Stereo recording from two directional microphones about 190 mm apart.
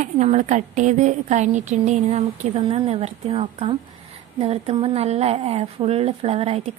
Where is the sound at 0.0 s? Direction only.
40° right (ahead or behind).